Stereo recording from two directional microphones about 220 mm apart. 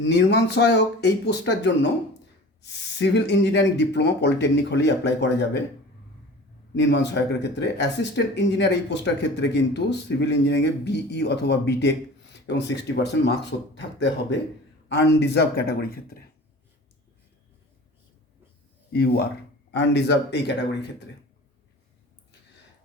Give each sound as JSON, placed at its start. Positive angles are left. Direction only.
{"t": 0.0, "sound": "speech", "side_deg": 50}
{"t": 6.7, "sound": "speech", "side_deg": 55}
{"t": 19.7, "sound": "speech", "side_deg": 55}